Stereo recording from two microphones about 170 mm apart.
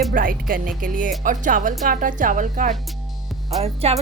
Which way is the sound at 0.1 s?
55° right (ahead or behind).